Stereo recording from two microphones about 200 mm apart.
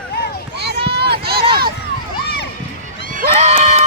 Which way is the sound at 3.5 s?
30° right (ahead or behind).